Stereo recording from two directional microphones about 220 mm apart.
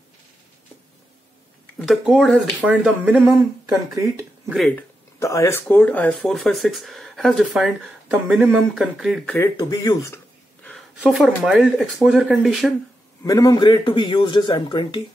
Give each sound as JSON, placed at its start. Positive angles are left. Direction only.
{"t": 1.9, "sound": "speech", "side_deg": 0}
{"t": 4.5, "sound": "speech", "side_deg": 5}
{"t": 9.6, "sound": "a sound", "side_deg": 15}
{"t": 11.0, "sound": "speech", "side_deg": 0}
{"t": 13.2, "sound": "a man's voice", "side_deg": 15}